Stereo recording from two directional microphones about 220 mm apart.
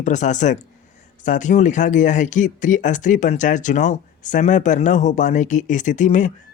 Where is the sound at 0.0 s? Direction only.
35° left (ahead or behind).